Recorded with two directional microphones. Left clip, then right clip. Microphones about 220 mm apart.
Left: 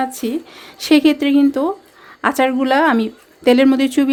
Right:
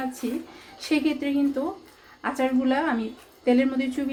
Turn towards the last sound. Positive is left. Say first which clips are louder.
# left 11 dB
turn(degrees=50)  # may be behind; listen again after turning